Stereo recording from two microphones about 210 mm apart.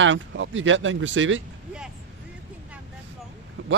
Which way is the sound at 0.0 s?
65° right (ahead or behind).